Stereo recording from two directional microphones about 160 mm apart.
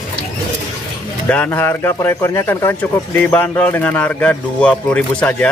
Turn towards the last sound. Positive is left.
turn(degrees=5)  # may be behind; listen again after turning